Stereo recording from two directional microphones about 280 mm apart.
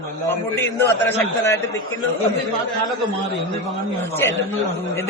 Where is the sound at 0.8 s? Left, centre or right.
Centre.